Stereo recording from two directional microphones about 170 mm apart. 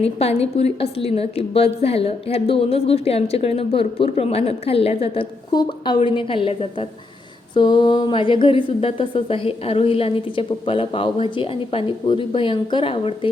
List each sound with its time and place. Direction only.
0.0 s a woman's voice: 35° left (ahead or behind)